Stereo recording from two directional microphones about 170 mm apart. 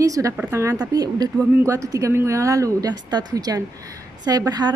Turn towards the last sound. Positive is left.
turn(degrees=-25)  # may be behind; listen again after turning